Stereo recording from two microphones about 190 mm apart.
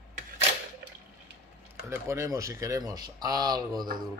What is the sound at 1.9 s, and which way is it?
Speech, 15° right (ahead or behind).